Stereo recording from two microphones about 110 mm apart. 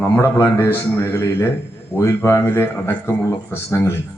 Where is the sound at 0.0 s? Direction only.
25° left (ahead or behind).